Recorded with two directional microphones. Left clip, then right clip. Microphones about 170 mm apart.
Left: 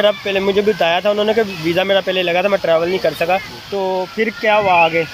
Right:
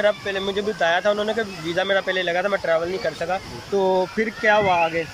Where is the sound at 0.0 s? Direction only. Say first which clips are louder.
Left 6 dB; 10° left (ahead or behind).